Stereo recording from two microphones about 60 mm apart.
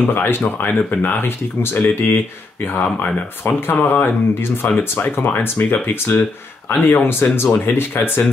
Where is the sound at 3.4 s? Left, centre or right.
Left.